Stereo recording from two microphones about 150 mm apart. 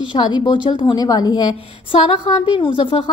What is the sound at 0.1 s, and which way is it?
A woman's voice, 30° left (ahead or behind).